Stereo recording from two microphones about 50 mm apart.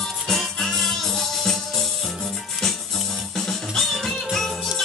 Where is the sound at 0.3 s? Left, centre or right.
Centre.